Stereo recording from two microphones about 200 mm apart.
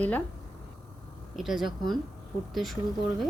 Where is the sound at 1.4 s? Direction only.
Centre (ahead or behind).